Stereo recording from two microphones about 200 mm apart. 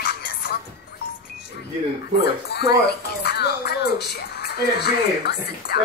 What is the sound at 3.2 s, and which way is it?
Music, 55° left (ahead or behind).